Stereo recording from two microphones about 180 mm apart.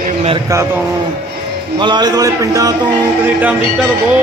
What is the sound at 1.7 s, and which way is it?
Speech, 25° right (ahead or behind).